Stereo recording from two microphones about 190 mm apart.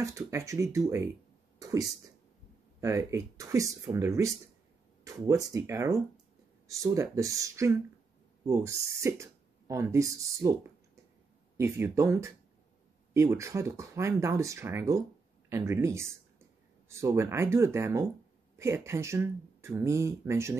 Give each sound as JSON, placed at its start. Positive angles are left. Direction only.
{"t": 0.0, "sound": "speech", "side_deg": -15}